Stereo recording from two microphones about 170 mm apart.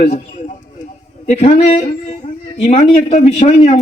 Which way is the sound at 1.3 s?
40° left (ahead or behind).